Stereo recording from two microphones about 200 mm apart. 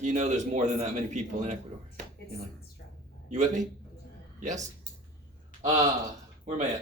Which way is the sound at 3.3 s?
35° right (ahead or behind).